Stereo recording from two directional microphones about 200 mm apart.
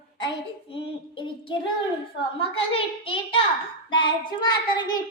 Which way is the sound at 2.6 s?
25° left (ahead or behind).